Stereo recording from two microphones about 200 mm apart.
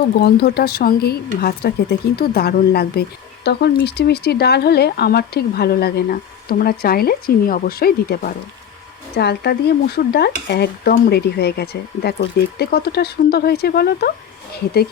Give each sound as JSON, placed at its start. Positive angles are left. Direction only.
{"t": 0.2, "sound": "speech", "side_deg": 50}